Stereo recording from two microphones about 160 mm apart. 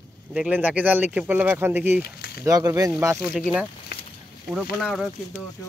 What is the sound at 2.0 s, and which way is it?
Speech, 75° left (ahead or behind).